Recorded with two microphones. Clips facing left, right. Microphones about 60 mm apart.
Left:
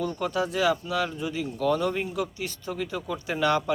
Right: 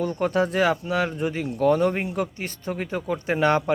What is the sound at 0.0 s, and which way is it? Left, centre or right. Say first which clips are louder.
A man's voice: right 5 dB; right.